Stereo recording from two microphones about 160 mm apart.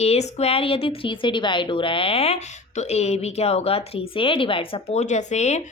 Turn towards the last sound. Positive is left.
turn(degrees=45)  # may be behind; listen again after turning